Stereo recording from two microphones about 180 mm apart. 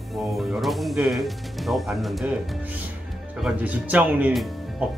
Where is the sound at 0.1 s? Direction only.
Centre (ahead or behind).